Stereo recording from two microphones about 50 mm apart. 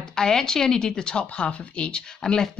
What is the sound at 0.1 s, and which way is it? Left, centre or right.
Speech, centre.